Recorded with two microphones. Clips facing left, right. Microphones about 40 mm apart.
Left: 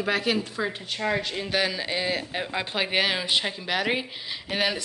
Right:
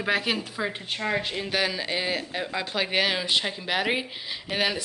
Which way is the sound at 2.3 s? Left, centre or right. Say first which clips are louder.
Even; centre.